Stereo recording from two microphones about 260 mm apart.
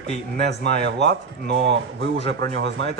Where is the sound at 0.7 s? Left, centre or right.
Right.